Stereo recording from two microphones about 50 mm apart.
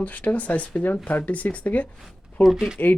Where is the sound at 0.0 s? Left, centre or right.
Left.